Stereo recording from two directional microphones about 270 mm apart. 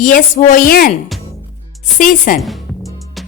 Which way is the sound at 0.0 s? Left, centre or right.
Left.